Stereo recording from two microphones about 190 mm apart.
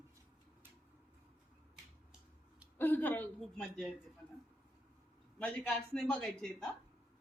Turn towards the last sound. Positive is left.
turn(degrees=5)  # may be behind; listen again after turning